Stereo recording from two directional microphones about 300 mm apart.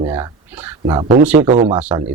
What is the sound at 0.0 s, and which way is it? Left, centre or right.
A man's voice, centre.